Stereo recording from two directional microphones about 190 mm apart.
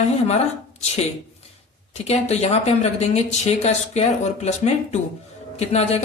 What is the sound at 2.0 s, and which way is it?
Speech, 35° left (ahead or behind).